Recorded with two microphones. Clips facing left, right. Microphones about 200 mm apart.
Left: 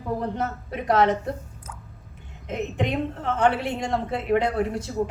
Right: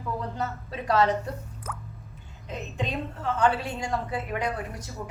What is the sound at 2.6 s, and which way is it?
Speech, 65° left (ahead or behind).